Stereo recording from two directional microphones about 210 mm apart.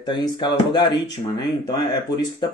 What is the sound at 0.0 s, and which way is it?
Speech, 20° left (ahead or behind).